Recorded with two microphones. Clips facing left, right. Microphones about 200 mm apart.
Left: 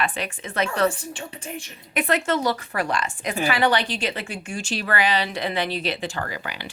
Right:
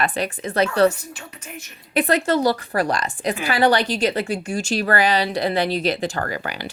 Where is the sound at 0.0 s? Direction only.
40° right (ahead or behind).